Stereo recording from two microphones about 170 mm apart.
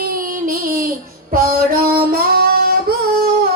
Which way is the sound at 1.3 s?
60° right (ahead or behind).